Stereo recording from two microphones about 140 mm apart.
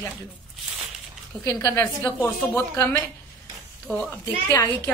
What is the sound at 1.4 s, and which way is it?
A woman's voice, 25° left (ahead or behind).